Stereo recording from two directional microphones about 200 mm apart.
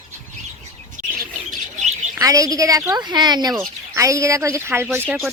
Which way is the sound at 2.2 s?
15° right (ahead or behind).